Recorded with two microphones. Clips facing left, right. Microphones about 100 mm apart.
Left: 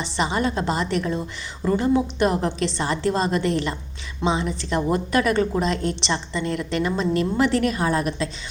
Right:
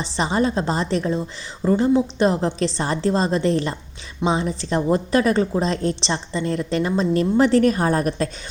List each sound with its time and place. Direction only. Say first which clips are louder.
0.0 s a woman's voice: right 2 dB; 35° right (ahead or behind)